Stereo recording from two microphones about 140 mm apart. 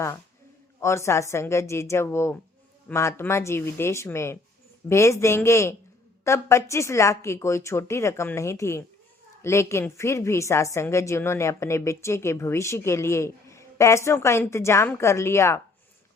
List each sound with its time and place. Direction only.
0.8 s a woman's voice: 20° left (ahead or behind)